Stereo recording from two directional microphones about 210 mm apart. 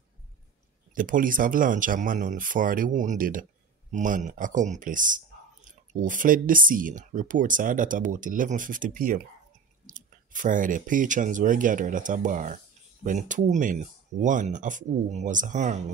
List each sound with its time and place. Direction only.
0.9 s speech: 40° right (ahead or behind)